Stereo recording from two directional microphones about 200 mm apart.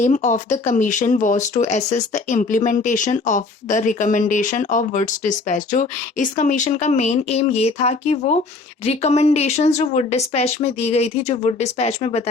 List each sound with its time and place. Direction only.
0.0 s speech: 35° left (ahead or behind)